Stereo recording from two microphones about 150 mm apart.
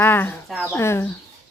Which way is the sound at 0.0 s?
15° left (ahead or behind).